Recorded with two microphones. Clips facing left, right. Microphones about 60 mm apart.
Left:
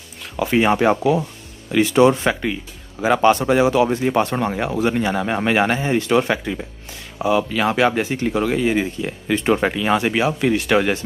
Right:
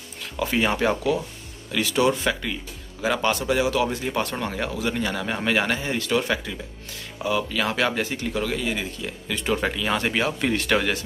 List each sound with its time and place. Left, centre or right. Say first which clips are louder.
0.4 s speech: left 6 dB; left
9.6 s speech: left 6 dB; left
10.0 s speech: left 5 dB; centre